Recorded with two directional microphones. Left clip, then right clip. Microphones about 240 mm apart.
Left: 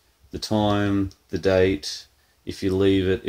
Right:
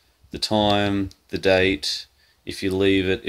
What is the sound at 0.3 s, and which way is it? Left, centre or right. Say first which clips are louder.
Speech: right 3 dB; right.